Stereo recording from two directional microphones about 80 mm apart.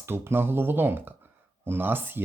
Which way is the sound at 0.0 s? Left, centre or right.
Right.